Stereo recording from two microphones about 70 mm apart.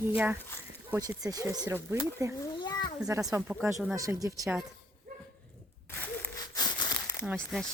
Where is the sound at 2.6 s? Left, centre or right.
Left.